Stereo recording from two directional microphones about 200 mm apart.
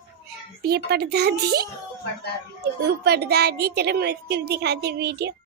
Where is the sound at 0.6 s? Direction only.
50° right (ahead or behind).